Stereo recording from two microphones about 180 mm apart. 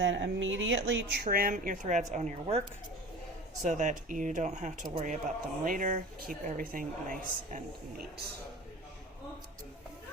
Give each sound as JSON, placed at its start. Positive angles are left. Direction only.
{"t": 0.0, "sound": "a woman's voice", "side_deg": -90}